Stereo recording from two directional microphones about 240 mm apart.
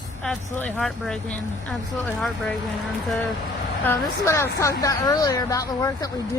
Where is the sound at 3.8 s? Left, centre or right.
Centre.